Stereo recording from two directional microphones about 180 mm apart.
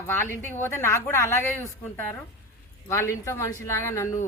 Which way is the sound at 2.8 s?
15° left (ahead or behind).